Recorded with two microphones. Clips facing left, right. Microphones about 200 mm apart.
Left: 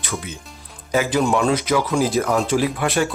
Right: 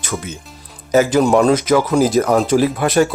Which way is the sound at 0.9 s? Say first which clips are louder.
Right 6 dB; 45° right (ahead or behind).